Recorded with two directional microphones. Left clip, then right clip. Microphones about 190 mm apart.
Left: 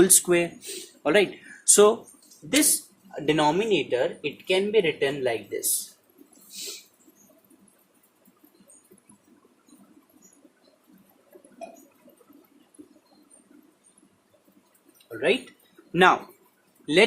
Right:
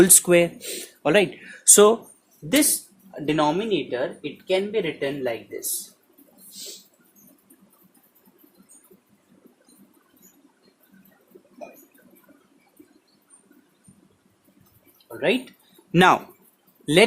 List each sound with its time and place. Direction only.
0.0 s speech: 35° right (ahead or behind)
3.2 s speech: 15° right (ahead or behind)
15.9 s speech: 55° right (ahead or behind)
16.8 s speech: 45° right (ahead or behind)